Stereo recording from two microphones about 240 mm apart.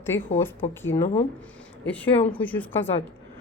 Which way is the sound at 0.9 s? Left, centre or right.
Left.